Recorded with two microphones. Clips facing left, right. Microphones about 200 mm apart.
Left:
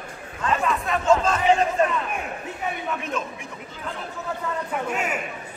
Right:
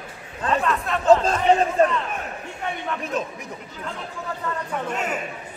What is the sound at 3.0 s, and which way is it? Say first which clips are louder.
Speech: right 2 dB; 35° right (ahead or behind).